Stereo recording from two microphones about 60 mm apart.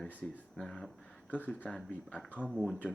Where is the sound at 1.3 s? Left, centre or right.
Left.